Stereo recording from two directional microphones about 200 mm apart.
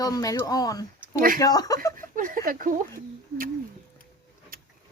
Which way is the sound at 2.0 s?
40° right (ahead or behind).